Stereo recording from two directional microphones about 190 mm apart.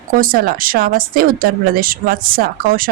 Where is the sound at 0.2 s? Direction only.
50° right (ahead or behind).